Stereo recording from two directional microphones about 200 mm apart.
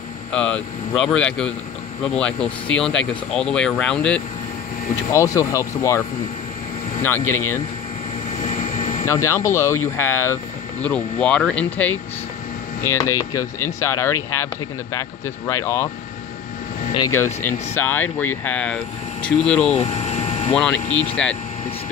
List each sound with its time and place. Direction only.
0.3 s speech: 5° left (ahead or behind)
5.1 s speech: 15° left (ahead or behind)
8.5 s vehicle: 35° left (ahead or behind)
9.0 s speech: 15° left (ahead or behind)
16.9 s speech: 15° left (ahead or behind)
19.8 s vehicle: 30° left (ahead or behind)
20.5 s speech: 5° left (ahead or behind)